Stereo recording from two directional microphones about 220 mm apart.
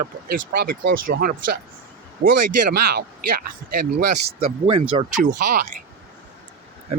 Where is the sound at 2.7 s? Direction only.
45° right (ahead or behind).